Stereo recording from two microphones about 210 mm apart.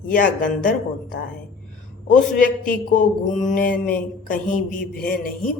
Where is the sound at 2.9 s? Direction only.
35° left (ahead or behind).